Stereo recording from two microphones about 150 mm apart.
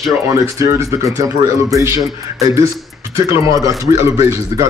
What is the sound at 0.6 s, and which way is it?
Speech, 20° right (ahead or behind).